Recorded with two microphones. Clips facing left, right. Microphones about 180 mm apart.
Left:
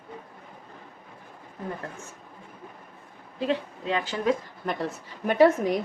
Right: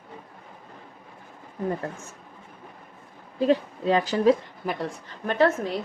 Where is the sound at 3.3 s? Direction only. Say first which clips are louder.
Right 6 dB; 40° right (ahead or behind).